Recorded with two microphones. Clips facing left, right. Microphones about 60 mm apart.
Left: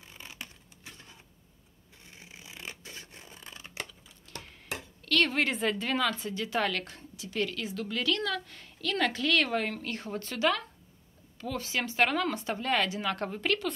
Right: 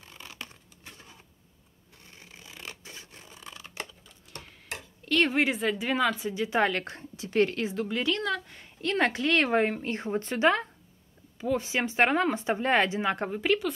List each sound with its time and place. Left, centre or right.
0.0 s a sound: centre
2.0 s a sound: centre
2.8 s scratch: right
4.3 s tick-tock: centre
5.0 s a woman's voice: centre
6.8 s speech: right; by 8.6 s centre
8.8 s speech: right
11.3 s speech: centre
13.3 s a woman's voice: centre